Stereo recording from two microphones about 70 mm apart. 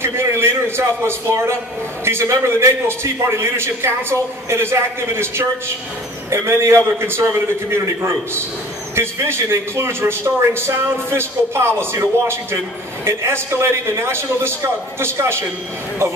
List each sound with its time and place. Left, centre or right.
0.0 s a man's voice: right